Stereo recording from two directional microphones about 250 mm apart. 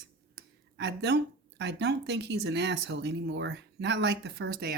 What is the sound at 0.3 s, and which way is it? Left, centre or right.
A woman's voice, right.